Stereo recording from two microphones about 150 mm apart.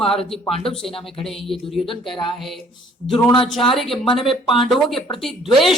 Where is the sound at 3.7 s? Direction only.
Centre (ahead or behind).